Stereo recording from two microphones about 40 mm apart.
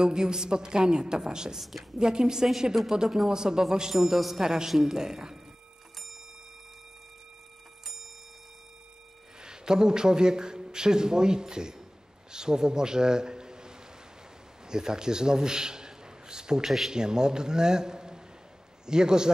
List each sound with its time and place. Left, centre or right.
0.0 s a woman's voice: centre
1.6 s a man's voice: centre
2.0 s a woman's voice: centre
3.9 s a man's voice: centre
9.4 s a man's voice: centre
16.6 s a man's voice: centre
16.9 s a woman's voice: centre